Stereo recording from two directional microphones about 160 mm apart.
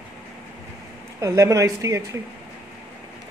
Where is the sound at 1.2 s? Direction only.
20° right (ahead or behind).